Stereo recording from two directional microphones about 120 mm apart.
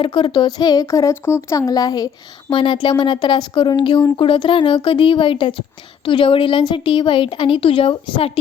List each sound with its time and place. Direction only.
0.0 s speech: 45° left (ahead or behind)
2.5 s a woman's voice: 45° left (ahead or behind)